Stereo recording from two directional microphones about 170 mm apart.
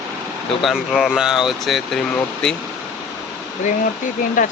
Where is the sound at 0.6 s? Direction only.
Centre (ahead or behind).